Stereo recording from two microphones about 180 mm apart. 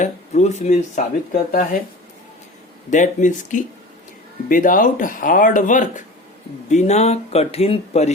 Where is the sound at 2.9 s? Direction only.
45° left (ahead or behind).